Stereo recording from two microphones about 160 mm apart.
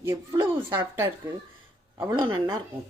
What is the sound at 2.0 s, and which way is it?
Speech, 25° right (ahead or behind).